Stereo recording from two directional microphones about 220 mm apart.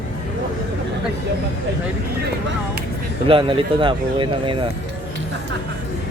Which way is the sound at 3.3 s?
25° right (ahead or behind).